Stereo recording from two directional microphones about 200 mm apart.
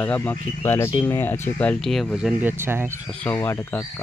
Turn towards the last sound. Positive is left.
turn(degrees=15)  # may be behind; listen again after turning